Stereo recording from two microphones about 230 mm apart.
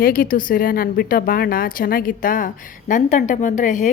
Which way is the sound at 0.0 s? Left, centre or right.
Left.